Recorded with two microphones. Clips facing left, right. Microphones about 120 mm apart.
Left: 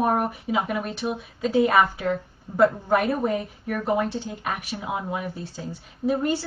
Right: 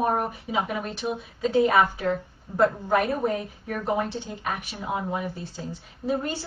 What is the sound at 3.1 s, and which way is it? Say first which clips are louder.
A woman's voice: left 1 dB; 5° left (ahead or behind).